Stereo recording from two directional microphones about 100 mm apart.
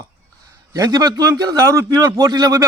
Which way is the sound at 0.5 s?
35° right (ahead or behind).